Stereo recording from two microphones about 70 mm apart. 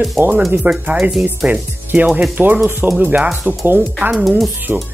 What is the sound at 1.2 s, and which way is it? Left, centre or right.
Speech, right.